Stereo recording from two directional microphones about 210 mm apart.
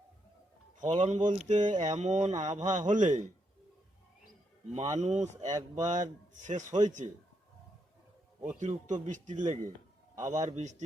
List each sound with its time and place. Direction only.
0.8 s speech: 35° right (ahead or behind)
4.7 s speech: 35° right (ahead or behind)
8.5 s speech: 35° right (ahead or behind)